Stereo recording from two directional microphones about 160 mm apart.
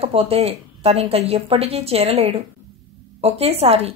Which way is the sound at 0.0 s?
35° right (ahead or behind).